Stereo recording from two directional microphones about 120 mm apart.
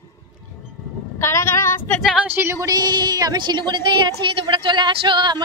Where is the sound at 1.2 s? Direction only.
20° left (ahead or behind).